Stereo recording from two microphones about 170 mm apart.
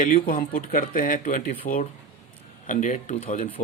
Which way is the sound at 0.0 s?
50° left (ahead or behind).